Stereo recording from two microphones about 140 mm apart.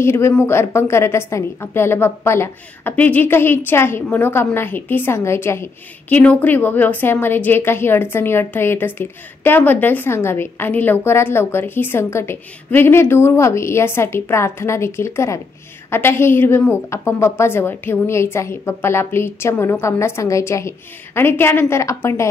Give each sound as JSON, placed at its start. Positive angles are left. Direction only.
{"t": 0.0, "sound": "a woman's voice", "side_deg": 20}